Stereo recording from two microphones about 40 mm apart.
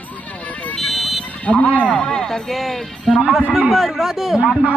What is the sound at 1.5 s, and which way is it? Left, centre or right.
Speech, left.